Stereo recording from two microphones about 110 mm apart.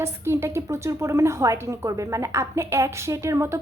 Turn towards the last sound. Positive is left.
turn(degrees=-25)  # may be behind; listen again after turning